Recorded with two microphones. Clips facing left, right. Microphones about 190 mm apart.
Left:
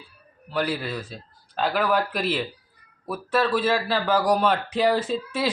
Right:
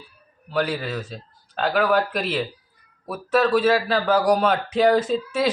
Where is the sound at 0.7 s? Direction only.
10° left (ahead or behind).